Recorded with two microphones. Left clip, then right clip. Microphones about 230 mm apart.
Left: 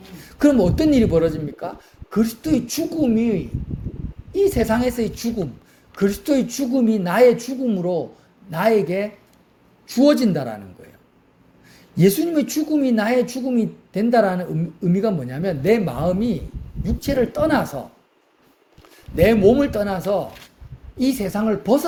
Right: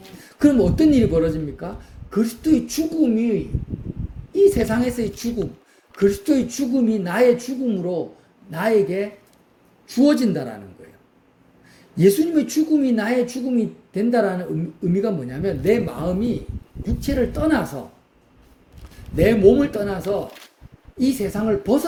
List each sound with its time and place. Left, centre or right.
0.2 s speech: left
11.9 s speech: left
19.1 s speech: left